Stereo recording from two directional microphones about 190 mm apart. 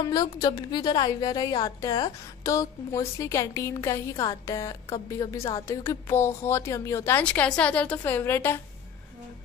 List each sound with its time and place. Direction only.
0.0 s a woman's voice: 20° left (ahead or behind)